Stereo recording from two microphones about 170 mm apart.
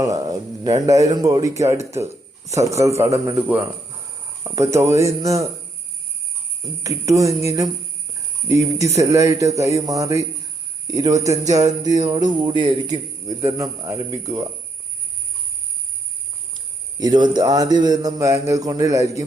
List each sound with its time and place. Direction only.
0.0 s a man's voice: 20° right (ahead or behind)
6.8 s a man's voice: 20° right (ahead or behind)
16.6 s a man's voice: 25° right (ahead or behind)